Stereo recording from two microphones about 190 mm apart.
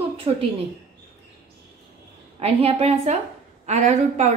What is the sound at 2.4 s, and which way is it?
A woman's voice, 30° right (ahead or behind).